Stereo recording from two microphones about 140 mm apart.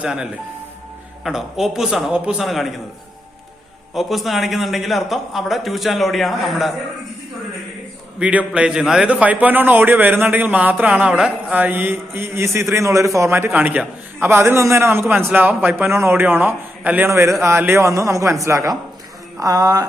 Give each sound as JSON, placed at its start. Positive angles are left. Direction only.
{"t": 0.0, "sound": "a man's voice", "side_deg": -5}
{"t": 3.9, "sound": "a man's voice", "side_deg": 0}
{"t": 8.2, "sound": "a man's voice", "side_deg": -10}